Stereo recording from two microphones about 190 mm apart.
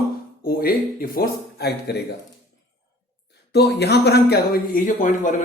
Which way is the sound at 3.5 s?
60° left (ahead or behind).